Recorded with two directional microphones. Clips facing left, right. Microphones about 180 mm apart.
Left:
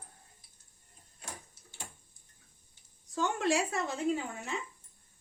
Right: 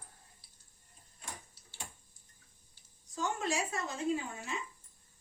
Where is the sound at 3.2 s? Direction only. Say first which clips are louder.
Left 5 dB; 65° left (ahead or behind).